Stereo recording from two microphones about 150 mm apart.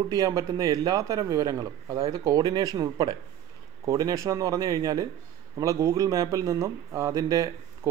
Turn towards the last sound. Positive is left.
turn(degrees=-25)  # may be behind; listen again after turning